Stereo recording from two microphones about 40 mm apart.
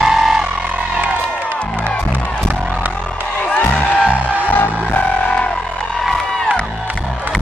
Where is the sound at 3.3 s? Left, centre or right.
Left.